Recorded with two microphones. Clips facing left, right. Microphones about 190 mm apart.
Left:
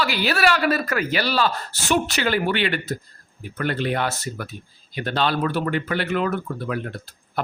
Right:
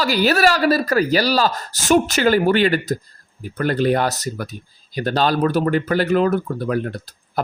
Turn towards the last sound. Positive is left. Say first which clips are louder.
# right 4 dB
turn(degrees=-40)  # may be behind; listen again after turning